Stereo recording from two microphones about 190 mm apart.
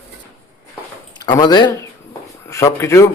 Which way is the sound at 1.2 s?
20° left (ahead or behind).